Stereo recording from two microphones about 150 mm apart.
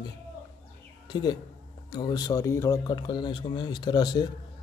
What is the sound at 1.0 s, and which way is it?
A man's voice, 30° left (ahead or behind).